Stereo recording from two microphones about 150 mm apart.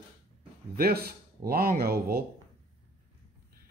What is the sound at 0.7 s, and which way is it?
Speech, 90° right.